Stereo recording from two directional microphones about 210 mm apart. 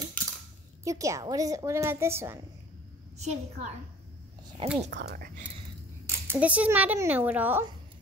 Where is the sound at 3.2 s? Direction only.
30° right (ahead or behind).